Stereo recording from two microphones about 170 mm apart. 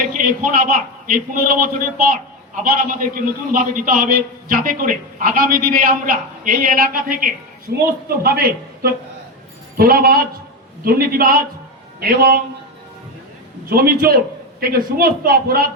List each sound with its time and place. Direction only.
0.1 s a man's voice: 55° right (ahead or behind)
13.7 s a man's voice: 60° right (ahead or behind)